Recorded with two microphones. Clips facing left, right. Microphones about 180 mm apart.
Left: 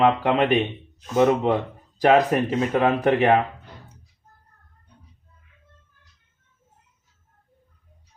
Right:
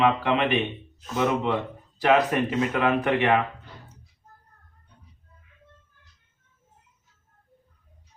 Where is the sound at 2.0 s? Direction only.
40° left (ahead or behind).